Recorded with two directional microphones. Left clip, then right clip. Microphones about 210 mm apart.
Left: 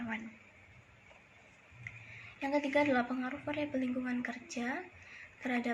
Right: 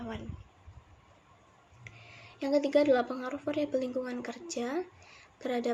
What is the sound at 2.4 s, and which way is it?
A woman's voice, 10° right (ahead or behind).